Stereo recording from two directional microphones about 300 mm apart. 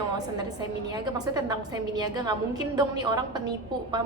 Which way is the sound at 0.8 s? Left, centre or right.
Centre.